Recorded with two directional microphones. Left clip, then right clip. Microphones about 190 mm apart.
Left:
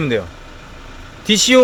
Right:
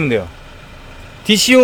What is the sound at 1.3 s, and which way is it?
Speech, 10° right (ahead or behind).